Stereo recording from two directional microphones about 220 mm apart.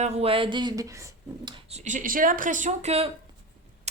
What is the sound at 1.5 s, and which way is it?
Speech, 30° right (ahead or behind).